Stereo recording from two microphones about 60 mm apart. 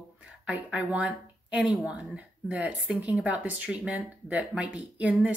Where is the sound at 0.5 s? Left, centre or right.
Right.